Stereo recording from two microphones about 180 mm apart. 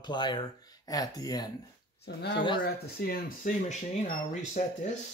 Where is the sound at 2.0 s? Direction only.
65° left (ahead or behind); by 4.7 s 45° left (ahead or behind).